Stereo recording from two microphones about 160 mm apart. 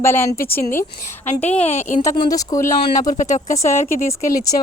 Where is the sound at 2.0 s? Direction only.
20° left (ahead or behind).